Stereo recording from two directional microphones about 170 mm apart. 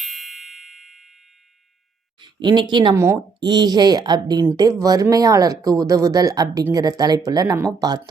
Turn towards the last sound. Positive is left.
turn(degrees=-20)  # may be behind; listen again after turning